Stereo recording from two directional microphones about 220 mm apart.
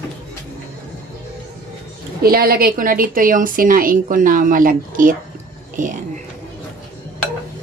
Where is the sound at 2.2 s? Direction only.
45° right (ahead or behind).